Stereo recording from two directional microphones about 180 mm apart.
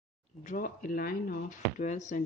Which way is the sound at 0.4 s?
50° left (ahead or behind).